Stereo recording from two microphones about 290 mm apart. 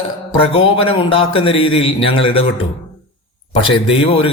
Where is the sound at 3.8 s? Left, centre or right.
Centre.